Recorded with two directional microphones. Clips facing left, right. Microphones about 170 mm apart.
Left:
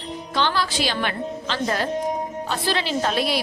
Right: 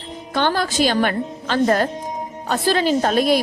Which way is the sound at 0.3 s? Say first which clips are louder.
Right 4 dB; 50° right (ahead or behind).